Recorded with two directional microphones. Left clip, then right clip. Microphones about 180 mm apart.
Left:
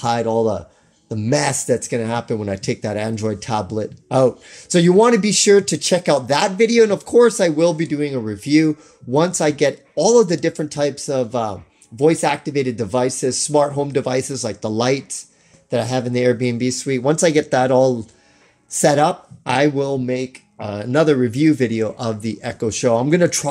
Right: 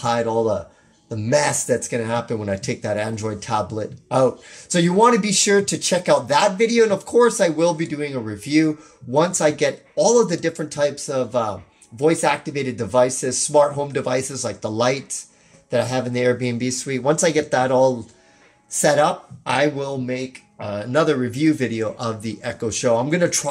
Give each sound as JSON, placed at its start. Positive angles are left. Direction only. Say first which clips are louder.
{"t": 0.0, "sound": "speech", "louder": "left 2 dB", "side_deg": 35}